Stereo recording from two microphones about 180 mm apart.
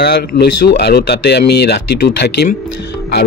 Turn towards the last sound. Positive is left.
turn(degrees=60)  # may be behind; listen again after turning